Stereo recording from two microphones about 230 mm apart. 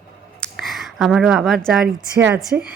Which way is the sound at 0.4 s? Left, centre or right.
Centre.